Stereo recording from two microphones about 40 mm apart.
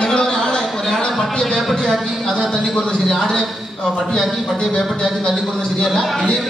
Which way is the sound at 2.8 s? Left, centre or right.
Centre.